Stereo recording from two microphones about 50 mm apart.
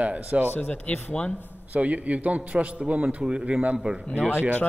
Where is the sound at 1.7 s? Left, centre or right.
Right.